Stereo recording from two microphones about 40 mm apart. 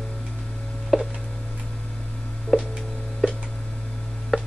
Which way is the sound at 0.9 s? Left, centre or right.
Centre.